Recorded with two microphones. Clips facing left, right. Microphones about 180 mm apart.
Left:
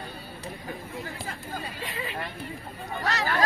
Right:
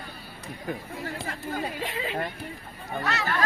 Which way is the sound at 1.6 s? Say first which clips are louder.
Right 4 dB; 60° right (ahead or behind).